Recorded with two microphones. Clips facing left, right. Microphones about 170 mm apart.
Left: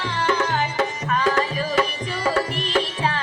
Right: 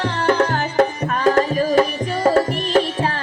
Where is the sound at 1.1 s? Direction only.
45° right (ahead or behind).